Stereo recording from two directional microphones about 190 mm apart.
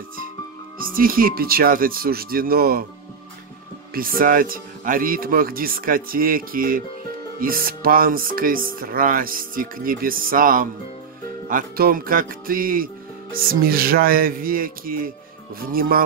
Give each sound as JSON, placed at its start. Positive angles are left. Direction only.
{"t": 0.7, "sound": "speech", "side_deg": -50}
{"t": 3.9, "sound": "speech", "side_deg": -50}